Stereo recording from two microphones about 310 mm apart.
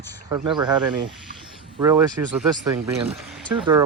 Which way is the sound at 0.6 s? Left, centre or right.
Right.